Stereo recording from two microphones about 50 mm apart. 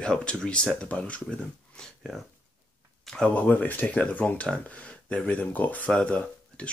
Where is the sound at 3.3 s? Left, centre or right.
Left.